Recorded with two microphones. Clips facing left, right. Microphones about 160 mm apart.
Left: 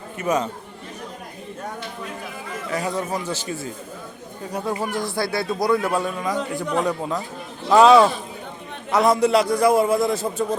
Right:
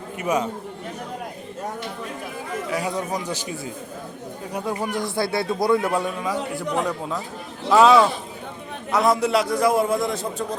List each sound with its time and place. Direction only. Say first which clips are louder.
0.2 s speech: left 1 dB; 10° right (ahead or behind)
2.6 s speech: left 2 dB; 10° right (ahead or behind)
4.9 s speech: even; 20° right (ahead or behind)
6.2 s a man's voice: left 1 dB; 5° right (ahead or behind)